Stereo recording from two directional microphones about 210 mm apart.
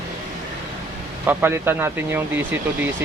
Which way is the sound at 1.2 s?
10° right (ahead or behind).